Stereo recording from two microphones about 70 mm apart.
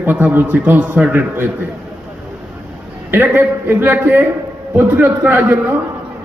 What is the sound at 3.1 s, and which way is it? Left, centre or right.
A man's voice, right.